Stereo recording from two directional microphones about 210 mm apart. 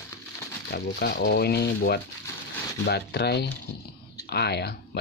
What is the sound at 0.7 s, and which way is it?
Speech, 50° left (ahead or behind).